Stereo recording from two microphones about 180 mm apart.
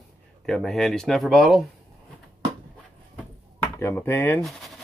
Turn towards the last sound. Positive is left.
turn(degrees=0)  # may be behind; listen again after turning